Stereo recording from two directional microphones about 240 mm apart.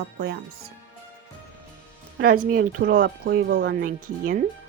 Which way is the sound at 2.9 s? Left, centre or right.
Right.